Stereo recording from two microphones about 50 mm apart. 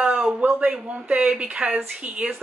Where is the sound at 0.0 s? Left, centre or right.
Centre.